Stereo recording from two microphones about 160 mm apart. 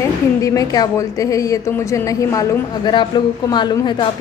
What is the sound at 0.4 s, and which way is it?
Speech, 20° left (ahead or behind).